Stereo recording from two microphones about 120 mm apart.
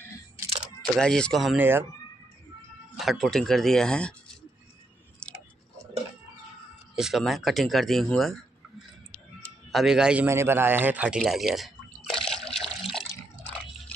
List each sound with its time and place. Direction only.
0.9 s speech: 5° left (ahead or behind)
1.6 s speech: 15° right (ahead or behind)
3.0 s speech: centre (ahead or behind)
5.2 s tick-tock: 5° left (ahead or behind)
7.0 s speech: centre (ahead or behind)
9.7 s speech: 5° right (ahead or behind)
10.2 s speech: 20° right (ahead or behind)
11.1 s water: centre (ahead or behind)